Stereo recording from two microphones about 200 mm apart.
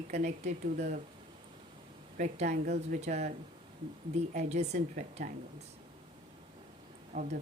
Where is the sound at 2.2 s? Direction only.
35° right (ahead or behind).